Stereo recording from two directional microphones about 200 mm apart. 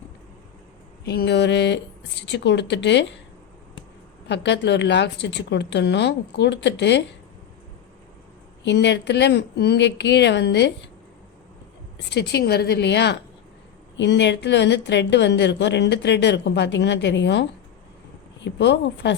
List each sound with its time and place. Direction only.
1.0 s a woman's voice: 55° left (ahead or behind)
4.3 s a woman's voice: 60° left (ahead or behind)
8.6 s a woman's voice: 60° left (ahead or behind)
12.1 s a woman's voice: 55° left (ahead or behind)